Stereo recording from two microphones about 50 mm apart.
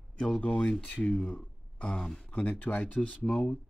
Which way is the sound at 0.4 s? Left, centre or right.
Left.